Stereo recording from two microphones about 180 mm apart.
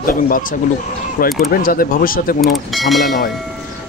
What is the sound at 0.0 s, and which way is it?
Speech, 50° left (ahead or behind).